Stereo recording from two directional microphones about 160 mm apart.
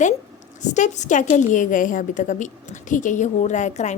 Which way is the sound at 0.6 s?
50° left (ahead or behind).